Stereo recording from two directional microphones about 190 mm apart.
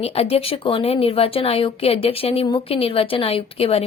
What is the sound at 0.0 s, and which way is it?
A woman's voice, 30° left (ahead or behind).